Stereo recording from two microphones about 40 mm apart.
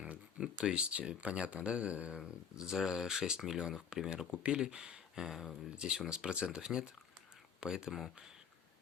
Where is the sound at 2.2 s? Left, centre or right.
Centre.